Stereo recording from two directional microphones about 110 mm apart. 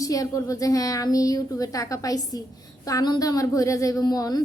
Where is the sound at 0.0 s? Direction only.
30° left (ahead or behind).